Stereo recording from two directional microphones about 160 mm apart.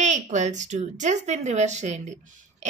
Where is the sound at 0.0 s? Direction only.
50° right (ahead or behind).